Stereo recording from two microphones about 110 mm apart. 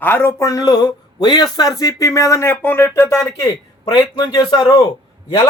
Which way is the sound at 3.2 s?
30° left (ahead or behind).